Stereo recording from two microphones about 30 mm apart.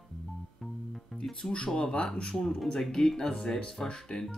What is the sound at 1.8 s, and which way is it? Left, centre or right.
Speech, left.